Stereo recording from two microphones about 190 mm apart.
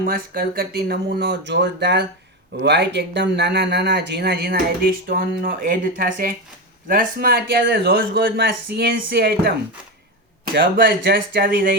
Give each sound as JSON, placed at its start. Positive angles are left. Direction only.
{"t": 0.0, "sound": "speech", "side_deg": -50}